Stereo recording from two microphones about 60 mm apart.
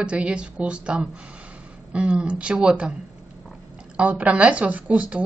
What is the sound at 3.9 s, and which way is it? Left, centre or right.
Speech, right.